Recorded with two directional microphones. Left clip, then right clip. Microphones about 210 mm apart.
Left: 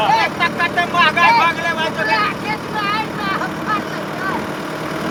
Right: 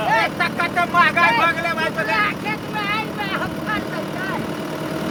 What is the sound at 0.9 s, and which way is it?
Vehicle, 20° right (ahead or behind).